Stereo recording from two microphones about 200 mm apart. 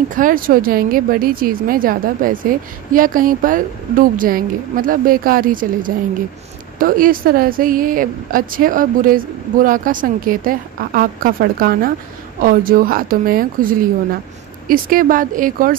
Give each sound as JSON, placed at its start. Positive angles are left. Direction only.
{"t": 0.1, "sound": "speech", "side_deg": -45}